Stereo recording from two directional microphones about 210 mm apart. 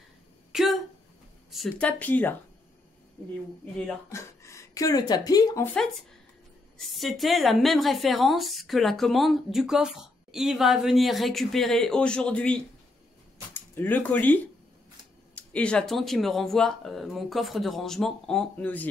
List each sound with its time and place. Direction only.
0.5 s a sound: centre (ahead or behind)
1.5 s speech: 5° left (ahead or behind)
3.7 s speech: 10° left (ahead or behind)
6.9 s a woman's voice: centre (ahead or behind)